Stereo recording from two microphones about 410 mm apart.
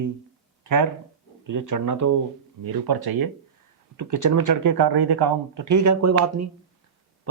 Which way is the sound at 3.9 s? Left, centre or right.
Right.